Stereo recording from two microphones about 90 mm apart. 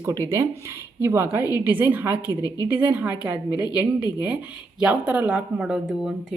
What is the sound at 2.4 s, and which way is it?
Speech, 45° left (ahead or behind).